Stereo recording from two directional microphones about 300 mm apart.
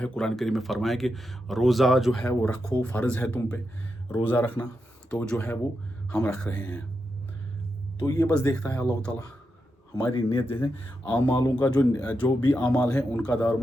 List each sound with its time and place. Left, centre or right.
0.0 s speech: centre
8.0 s speech: centre
9.9 s speech: centre
12.6 s speech: centre